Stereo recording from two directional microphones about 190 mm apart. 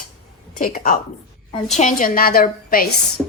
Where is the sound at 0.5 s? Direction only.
45° left (ahead or behind).